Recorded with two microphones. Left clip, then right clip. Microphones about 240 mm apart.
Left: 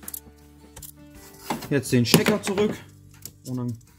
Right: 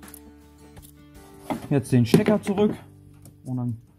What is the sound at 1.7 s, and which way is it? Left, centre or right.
Speech, right.